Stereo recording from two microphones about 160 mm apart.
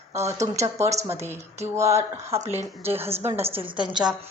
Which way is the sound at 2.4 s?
45° right (ahead or behind).